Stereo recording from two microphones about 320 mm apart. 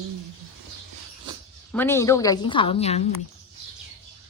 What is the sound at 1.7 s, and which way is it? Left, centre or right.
A woman's voice, centre.